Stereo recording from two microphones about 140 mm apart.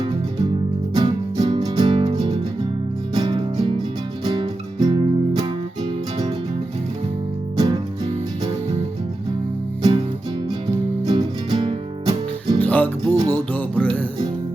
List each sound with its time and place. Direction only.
0.9 s music: 35° right (ahead or behind)
7.6 s music: 30° right (ahead or behind)
11.0 s music: 35° right (ahead or behind)
12.5 s music: 10° left (ahead or behind)